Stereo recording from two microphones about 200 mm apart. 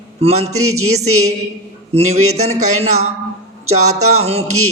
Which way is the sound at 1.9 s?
30° right (ahead or behind).